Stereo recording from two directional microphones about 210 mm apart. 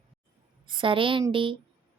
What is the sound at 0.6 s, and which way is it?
Speech, 25° right (ahead or behind).